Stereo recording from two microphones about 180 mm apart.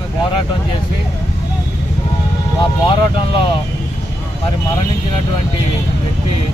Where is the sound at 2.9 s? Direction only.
30° left (ahead or behind).